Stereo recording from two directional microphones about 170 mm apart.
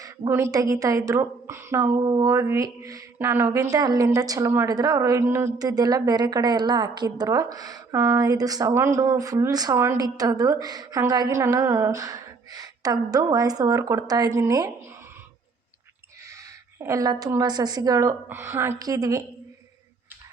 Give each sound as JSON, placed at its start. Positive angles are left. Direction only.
{"t": 0.0, "sound": "a woman's voice", "side_deg": -15}
{"t": 2.0, "sound": "speech", "side_deg": -25}
{"t": 16.7, "sound": "speech", "side_deg": -15}